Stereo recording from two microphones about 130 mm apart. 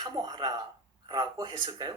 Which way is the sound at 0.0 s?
30° right (ahead or behind).